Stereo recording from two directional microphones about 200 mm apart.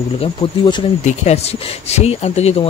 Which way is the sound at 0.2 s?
25° left (ahead or behind).